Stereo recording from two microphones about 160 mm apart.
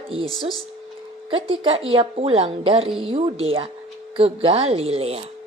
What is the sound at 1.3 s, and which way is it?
Speech, 35° right (ahead or behind).